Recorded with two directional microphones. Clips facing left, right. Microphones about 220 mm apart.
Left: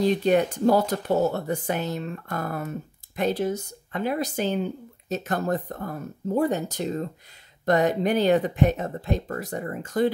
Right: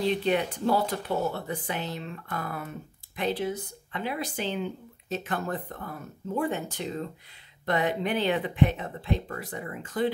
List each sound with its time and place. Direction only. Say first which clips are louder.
0.0 s speech: left 5 dB; 45° left (ahead or behind)